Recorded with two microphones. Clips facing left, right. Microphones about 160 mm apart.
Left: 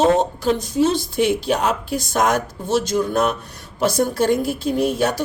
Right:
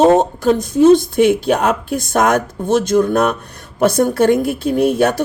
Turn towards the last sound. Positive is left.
turn(degrees=-55)  # may be behind; listen again after turning